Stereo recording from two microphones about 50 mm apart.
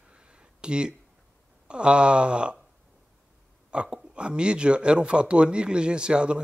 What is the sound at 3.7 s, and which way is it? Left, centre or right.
Speech, centre.